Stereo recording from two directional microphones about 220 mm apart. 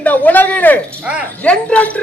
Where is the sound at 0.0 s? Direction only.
5° left (ahead or behind).